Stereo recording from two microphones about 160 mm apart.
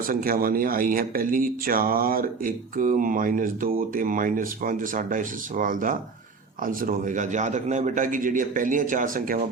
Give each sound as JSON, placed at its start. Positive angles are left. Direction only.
{"t": 0.1, "sound": "speech", "side_deg": -60}